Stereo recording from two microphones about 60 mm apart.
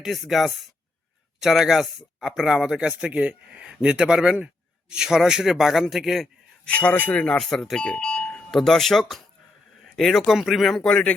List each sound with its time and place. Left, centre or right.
0.0 s speech: centre
6.7 s speech: left
7.3 s speech: centre
7.8 s doorbell: centre
8.4 s speech: centre
10.8 s speech: centre